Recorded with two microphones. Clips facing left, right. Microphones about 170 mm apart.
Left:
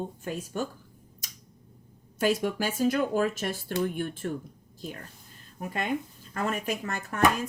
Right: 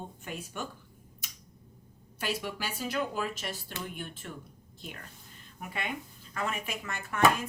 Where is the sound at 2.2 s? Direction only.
45° left (ahead or behind).